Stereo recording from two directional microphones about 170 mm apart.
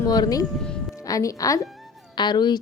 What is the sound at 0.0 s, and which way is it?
A woman's voice, 20° left (ahead or behind).